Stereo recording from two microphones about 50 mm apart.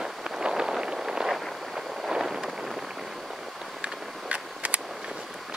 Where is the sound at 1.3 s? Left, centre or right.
Centre.